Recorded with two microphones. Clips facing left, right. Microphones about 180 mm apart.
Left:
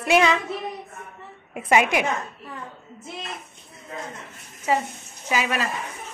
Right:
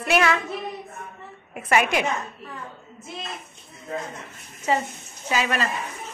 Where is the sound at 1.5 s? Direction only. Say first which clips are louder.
Left 2 dB; 20° left (ahead or behind).